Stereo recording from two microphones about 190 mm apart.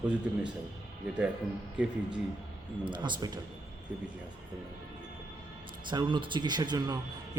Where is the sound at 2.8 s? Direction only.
25° right (ahead or behind).